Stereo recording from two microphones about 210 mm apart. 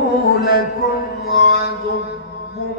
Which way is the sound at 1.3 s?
50° left (ahead or behind).